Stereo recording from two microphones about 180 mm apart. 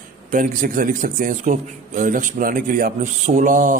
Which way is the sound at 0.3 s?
50° right (ahead or behind).